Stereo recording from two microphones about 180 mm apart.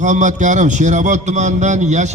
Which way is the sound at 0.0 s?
45° right (ahead or behind).